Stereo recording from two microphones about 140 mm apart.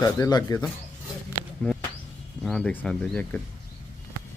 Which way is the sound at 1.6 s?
5° left (ahead or behind).